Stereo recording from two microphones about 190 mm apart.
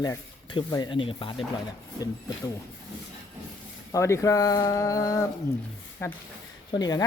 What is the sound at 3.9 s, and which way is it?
Speech, 15° left (ahead or behind).